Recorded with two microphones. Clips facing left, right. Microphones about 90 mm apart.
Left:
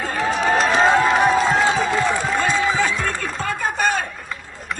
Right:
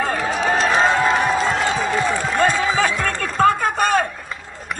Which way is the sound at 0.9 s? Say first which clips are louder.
Left 2 dB; 15° left (ahead or behind).